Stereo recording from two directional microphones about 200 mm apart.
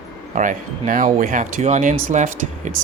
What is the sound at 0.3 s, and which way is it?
Speech, 40° right (ahead or behind).